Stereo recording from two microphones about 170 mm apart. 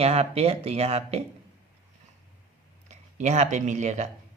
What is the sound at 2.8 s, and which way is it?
Speech, 40° right (ahead or behind).